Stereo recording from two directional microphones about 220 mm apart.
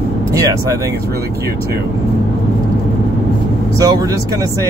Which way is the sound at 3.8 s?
15° right (ahead or behind).